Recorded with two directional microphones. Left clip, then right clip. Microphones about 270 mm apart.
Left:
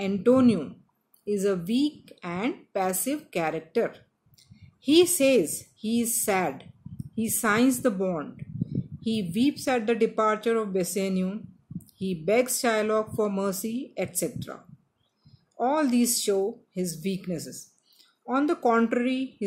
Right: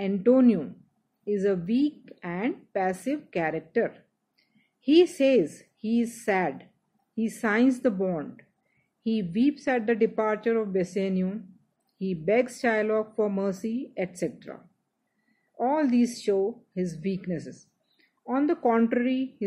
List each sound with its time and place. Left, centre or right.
0.0 s a woman's voice: centre
15.5 s a woman's voice: centre